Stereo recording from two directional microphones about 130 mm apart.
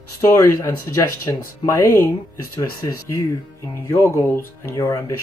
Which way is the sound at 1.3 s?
35° left (ahead or behind).